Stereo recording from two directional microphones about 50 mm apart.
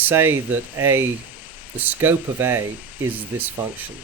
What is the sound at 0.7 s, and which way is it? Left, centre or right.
Speech, right.